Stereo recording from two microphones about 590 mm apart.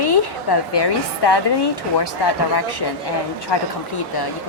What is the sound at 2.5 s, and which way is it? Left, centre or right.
A woman's voice, left.